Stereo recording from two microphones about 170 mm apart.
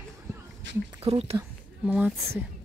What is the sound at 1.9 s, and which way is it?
Speech, 5° right (ahead or behind).